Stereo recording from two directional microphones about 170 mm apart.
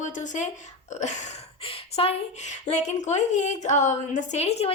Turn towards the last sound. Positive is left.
turn(degrees=40)  # may be behind; listen again after turning